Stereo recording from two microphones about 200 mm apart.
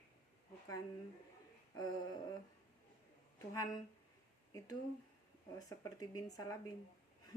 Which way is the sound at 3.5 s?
20° left (ahead or behind).